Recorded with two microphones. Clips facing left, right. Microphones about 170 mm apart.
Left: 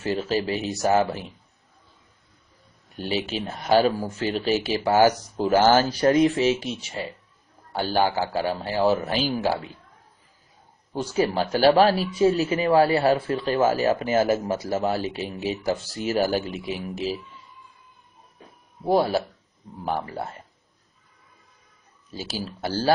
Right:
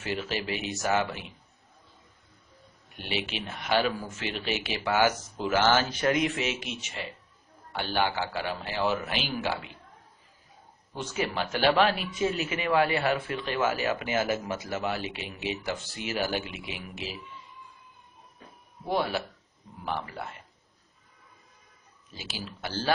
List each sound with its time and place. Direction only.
0.0 s speech: 40° left (ahead or behind)
2.9 s speech: 35° left (ahead or behind)
11.0 s speech: 35° left (ahead or behind)
18.9 s speech: 40° left (ahead or behind)
22.1 s speech: 40° left (ahead or behind)